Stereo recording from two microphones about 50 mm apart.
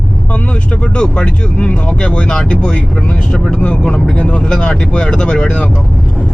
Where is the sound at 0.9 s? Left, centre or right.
Left.